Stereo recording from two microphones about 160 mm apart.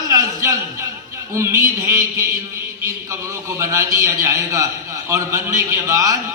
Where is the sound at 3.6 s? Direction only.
20° right (ahead or behind).